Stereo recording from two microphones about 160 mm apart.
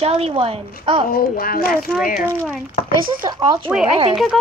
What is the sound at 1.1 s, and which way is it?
Speech, 65° left (ahead or behind).